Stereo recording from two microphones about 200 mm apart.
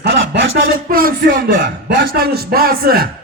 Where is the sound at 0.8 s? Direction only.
45° right (ahead or behind).